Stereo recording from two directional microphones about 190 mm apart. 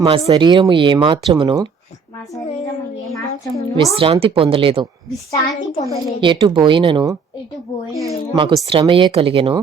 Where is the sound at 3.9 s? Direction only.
30° right (ahead or behind).